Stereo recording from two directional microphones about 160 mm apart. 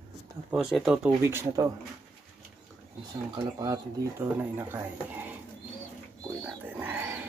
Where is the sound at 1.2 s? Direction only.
15° right (ahead or behind).